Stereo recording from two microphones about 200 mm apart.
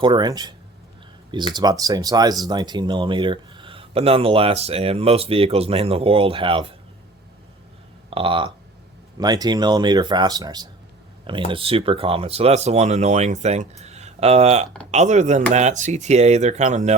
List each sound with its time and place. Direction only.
0.0 s speech: 20° right (ahead or behind)
1.5 s speech: 20° right (ahead or behind)
8.1 s speech: 25° right (ahead or behind)